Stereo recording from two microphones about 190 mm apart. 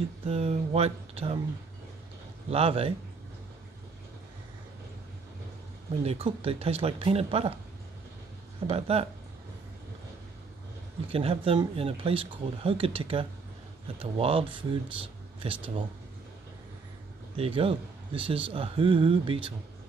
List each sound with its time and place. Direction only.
0.3 s speech: 30° right (ahead or behind)
2.5 s speech: 30° right (ahead or behind)
6.0 s speech: 30° right (ahead or behind)
8.6 s speech: 30° right (ahead or behind)
11.1 s speech: 30° right (ahead or behind)
17.4 s speech: 30° right (ahead or behind)